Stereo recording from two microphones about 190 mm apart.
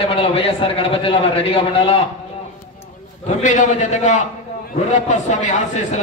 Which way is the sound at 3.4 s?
40° left (ahead or behind).